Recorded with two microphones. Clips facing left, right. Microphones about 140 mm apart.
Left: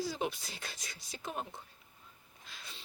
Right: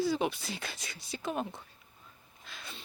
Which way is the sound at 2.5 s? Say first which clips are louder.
Right 5 dB; 60° right (ahead or behind).